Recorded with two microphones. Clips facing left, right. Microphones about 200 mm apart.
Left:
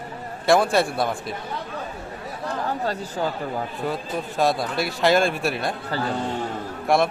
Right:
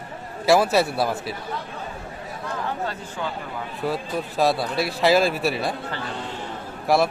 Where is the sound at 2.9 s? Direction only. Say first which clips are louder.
Left 4 dB; 40° left (ahead or behind).